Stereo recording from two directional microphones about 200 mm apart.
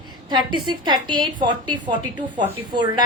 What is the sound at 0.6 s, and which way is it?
A woman's voice, 20° right (ahead or behind).